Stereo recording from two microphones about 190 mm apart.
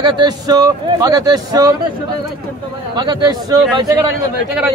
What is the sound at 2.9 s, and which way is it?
Speech, 20° right (ahead or behind).